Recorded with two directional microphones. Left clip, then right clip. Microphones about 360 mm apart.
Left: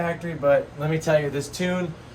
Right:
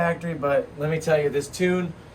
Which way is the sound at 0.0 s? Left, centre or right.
Centre.